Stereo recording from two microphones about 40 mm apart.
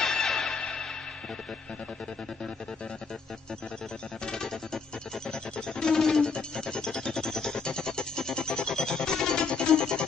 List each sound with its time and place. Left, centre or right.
0.0 s music: centre
0.6 s music: centre
4.3 s music: centre
5.9 s music: centre
6.2 s music: centre